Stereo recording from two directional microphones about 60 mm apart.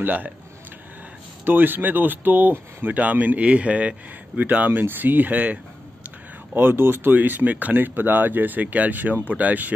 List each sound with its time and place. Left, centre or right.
0.0 s speech: right
1.4 s speech: right